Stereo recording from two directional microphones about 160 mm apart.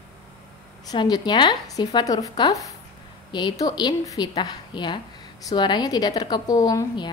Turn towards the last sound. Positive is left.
turn(degrees=20)  # may be behind; listen again after turning